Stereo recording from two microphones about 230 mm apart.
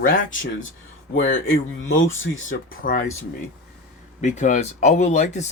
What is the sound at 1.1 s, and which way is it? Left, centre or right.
Speech, left.